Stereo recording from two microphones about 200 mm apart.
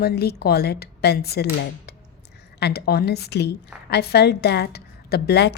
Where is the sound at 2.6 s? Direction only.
55° left (ahead or behind).